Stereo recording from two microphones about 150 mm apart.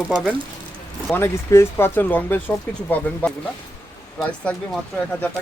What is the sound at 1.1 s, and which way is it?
Speech, 15° left (ahead or behind).